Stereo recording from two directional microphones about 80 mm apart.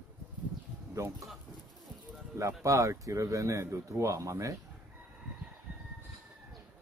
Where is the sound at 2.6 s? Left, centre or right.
Right.